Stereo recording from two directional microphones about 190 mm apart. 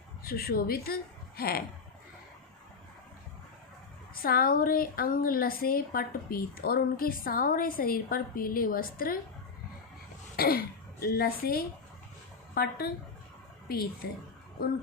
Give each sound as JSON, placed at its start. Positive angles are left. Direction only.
{"t": 0.3, "sound": "a woman's voice", "side_deg": 55}
{"t": 4.1, "sound": "a woman's voice", "side_deg": 50}
{"t": 10.3, "sound": "cough", "side_deg": 55}
{"t": 11.0, "sound": "a woman's voice", "side_deg": 55}